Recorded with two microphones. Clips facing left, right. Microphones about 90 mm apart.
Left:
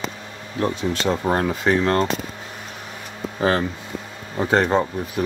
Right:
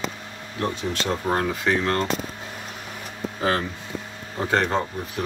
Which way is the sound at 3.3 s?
30° left (ahead or behind).